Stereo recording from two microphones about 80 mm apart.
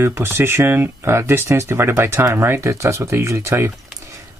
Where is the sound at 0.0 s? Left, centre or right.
Right.